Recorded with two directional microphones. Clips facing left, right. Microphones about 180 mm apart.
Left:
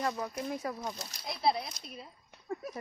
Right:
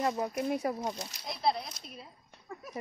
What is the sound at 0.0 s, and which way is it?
Speech, 25° right (ahead or behind).